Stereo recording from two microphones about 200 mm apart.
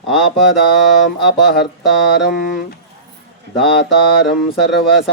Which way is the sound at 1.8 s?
Centre (ahead or behind).